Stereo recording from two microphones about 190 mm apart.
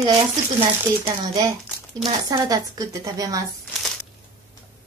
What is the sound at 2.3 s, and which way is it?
Speech, 20° right (ahead or behind).